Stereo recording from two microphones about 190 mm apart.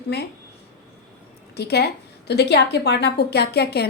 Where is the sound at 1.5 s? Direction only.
60° left (ahead or behind).